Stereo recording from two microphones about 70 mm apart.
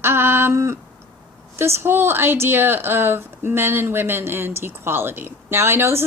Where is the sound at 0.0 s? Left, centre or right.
Right.